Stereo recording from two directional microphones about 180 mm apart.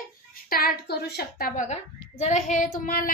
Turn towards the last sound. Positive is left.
turn(degrees=50)  # may be behind; listen again after turning